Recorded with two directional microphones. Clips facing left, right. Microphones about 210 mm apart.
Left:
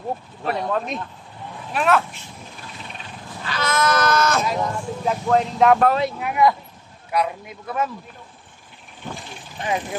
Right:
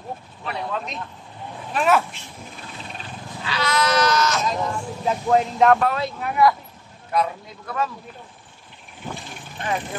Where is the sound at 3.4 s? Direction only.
50° left (ahead or behind).